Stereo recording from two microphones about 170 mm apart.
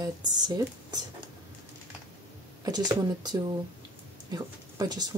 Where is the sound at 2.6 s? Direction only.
25° right (ahead or behind).